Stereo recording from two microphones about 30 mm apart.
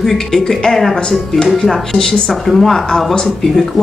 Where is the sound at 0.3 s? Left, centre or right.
Centre.